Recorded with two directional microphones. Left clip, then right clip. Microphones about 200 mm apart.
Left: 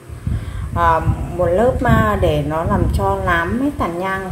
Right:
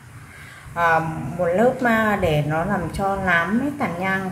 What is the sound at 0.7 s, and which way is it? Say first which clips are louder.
Speech: left 3 dB; 15° left (ahead or behind).